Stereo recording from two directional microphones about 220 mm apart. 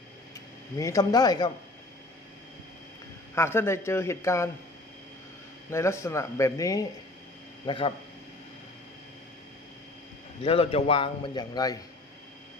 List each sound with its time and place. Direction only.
0.8 s speech: 15° left (ahead or behind)
3.3 s speech: 10° left (ahead or behind)
5.7 s a man's voice: 10° left (ahead or behind)
10.4 s a man's voice: 25° left (ahead or behind)